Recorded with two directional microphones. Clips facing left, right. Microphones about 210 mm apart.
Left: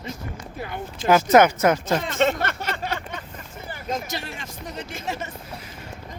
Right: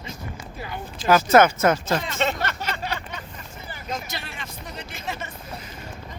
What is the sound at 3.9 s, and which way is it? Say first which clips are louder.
Speech: left 4 dB; 45° left (ahead or behind).